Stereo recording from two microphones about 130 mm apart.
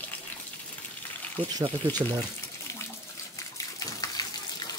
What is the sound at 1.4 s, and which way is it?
Speech, 45° right (ahead or behind).